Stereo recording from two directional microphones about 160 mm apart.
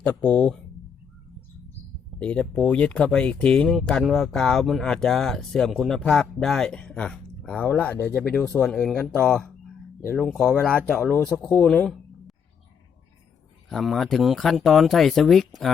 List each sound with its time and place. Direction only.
0.0 s speech: 10° left (ahead or behind)
2.1 s speech: 5° left (ahead or behind)
13.7 s speech: centre (ahead or behind)